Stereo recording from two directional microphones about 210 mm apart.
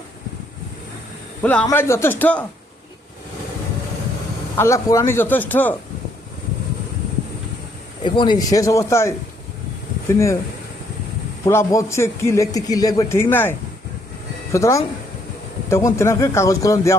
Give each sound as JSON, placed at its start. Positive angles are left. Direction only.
{"t": 1.4, "sound": "speech", "side_deg": 10}
{"t": 4.5, "sound": "speech", "side_deg": 15}
{"t": 8.0, "sound": "speech", "side_deg": 20}
{"t": 11.4, "sound": "speech", "side_deg": 15}